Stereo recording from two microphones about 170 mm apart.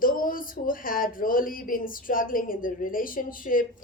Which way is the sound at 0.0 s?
55° left (ahead or behind).